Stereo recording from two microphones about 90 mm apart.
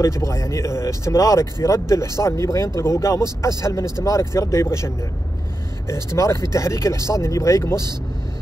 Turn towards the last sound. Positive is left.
turn(degrees=35)  # may be behind; listen again after turning